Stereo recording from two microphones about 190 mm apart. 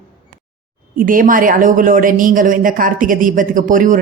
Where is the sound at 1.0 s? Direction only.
45° right (ahead or behind).